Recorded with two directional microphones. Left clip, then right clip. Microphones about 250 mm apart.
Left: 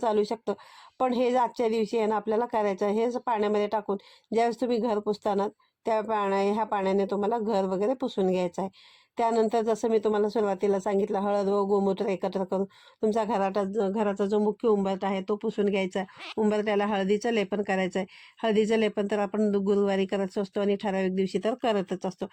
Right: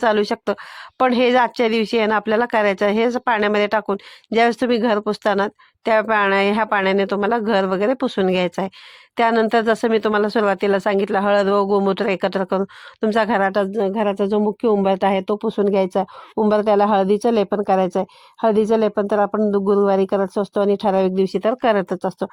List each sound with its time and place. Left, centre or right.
0.0 s speech: right
11.6 s speech: right
11.9 s speech: right
13.5 s speech: right
15.4 s speech: right